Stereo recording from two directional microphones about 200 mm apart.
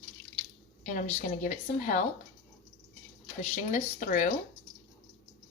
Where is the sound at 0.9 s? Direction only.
35° left (ahead or behind).